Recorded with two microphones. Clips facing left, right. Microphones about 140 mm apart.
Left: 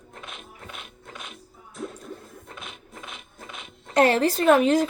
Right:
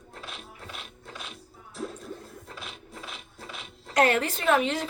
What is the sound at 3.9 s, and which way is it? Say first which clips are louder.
Speech: left 4 dB; 30° left (ahead or behind).